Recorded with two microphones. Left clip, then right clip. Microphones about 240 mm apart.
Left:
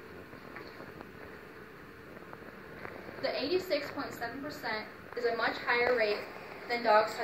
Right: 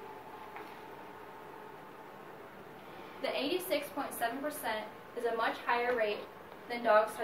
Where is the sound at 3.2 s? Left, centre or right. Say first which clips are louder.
Left 2 dB; centre.